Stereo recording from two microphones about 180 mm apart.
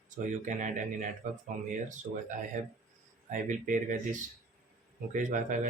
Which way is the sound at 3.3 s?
45° right (ahead or behind).